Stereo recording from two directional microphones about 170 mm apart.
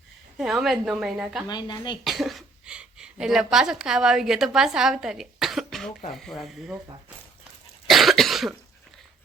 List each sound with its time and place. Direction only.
0.3 s a woman's voice: centre (ahead or behind)
1.5 s speech: 25° left (ahead or behind)
2.0 s a woman's voice: centre (ahead or behind)
7.9 s cough: centre (ahead or behind)